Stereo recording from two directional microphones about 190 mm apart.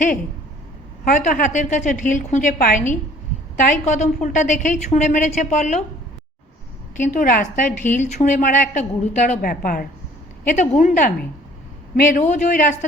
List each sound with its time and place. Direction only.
1.0 s a woman's voice: 45° left (ahead or behind)
6.9 s a woman's voice: 40° left (ahead or behind)